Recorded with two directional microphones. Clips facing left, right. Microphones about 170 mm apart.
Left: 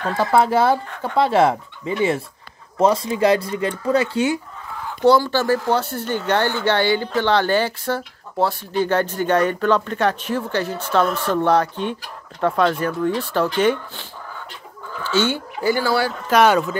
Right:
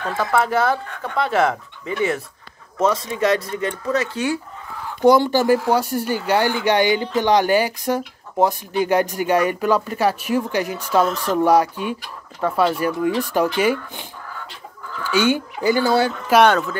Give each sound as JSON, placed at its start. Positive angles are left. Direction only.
{"t": 0.2, "sound": "speech", "side_deg": 30}
{"t": 5.0, "sound": "speech", "side_deg": -15}
{"t": 15.0, "sound": "speech", "side_deg": -15}
{"t": 16.3, "sound": "speech", "side_deg": 0}